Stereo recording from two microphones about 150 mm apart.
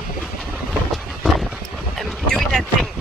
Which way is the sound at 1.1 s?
Centre (ahead or behind).